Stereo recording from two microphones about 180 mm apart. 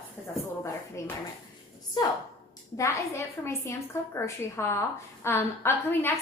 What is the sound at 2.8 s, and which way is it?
A woman's voice, 15° left (ahead or behind).